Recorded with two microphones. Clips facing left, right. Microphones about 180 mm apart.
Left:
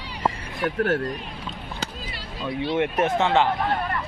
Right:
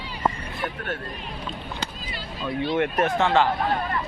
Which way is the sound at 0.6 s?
85° left.